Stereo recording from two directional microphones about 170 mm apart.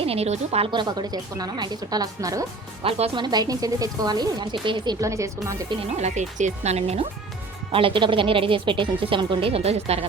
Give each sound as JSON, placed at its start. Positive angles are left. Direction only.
{"t": 0.0, "sound": "speech", "side_deg": -35}
{"t": 2.8, "sound": "speech", "side_deg": -30}
{"t": 6.0, "sound": "speech", "side_deg": -45}